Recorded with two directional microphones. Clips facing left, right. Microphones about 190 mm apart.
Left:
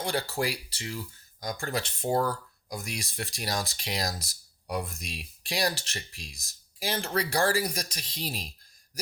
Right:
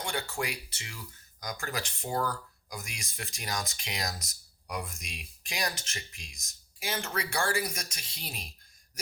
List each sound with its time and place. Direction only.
0.0 s speech: 35° left (ahead or behind)